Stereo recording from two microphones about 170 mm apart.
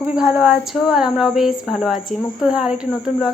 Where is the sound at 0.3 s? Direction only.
5° right (ahead or behind).